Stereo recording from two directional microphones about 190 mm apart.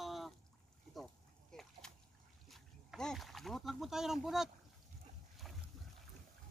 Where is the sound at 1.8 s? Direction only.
5° left (ahead or behind).